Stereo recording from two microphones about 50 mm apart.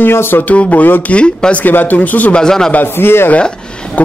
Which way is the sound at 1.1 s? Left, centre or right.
Left.